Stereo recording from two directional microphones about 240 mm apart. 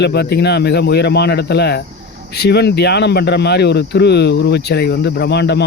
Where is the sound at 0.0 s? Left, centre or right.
Left.